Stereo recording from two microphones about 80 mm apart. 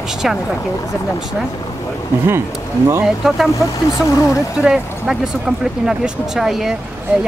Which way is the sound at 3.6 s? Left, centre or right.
Left.